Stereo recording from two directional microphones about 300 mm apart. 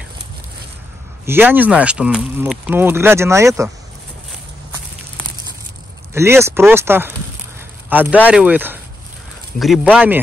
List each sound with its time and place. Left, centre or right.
1.2 s speech: centre
6.1 s speech: centre